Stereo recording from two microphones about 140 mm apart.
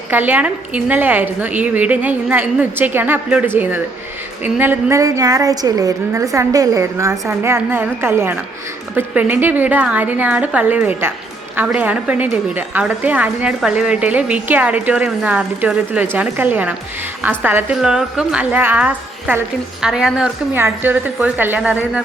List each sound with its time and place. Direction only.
0.1 s a woman's voice: 15° right (ahead or behind)
20.5 s a woman's voice: 15° right (ahead or behind)